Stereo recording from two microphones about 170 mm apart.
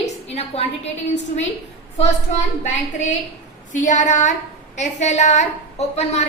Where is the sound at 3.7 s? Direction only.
45° left (ahead or behind).